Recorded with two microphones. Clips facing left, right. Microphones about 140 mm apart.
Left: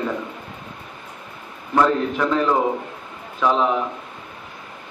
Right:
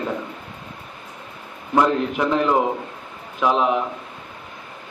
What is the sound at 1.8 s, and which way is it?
A man's voice, 15° right (ahead or behind).